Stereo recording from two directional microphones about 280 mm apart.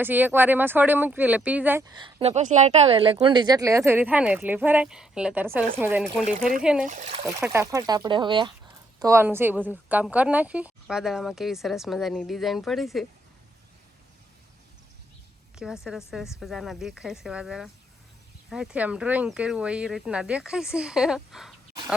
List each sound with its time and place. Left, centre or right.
0.0 s speech: centre
6.8 s speech: right
7.3 s speech: centre
15.5 s speech: centre